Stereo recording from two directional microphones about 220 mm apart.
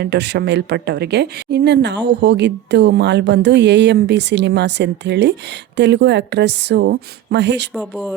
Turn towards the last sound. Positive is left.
turn(degrees=-50)  # may be behind; listen again after turning